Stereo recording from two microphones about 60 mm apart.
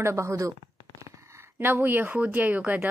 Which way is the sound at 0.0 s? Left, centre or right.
Right.